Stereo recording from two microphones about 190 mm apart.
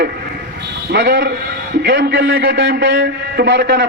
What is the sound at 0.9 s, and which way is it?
A man's voice, 70° right (ahead or behind).